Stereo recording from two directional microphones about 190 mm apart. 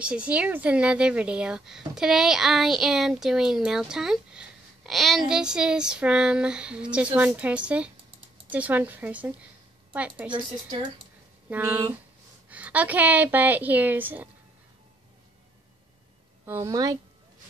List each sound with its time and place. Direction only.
0.0 s a woman's voice: 5° right (ahead or behind)
11.5 s a woman's voice: 10° right (ahead or behind)
16.4 s a woman's voice: 15° right (ahead or behind)